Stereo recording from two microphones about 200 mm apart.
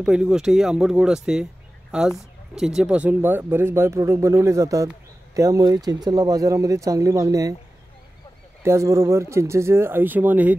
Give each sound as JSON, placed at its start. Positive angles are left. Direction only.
{"t": 0.0, "sound": "speech", "side_deg": -5}
{"t": 8.6, "sound": "speech", "side_deg": -15}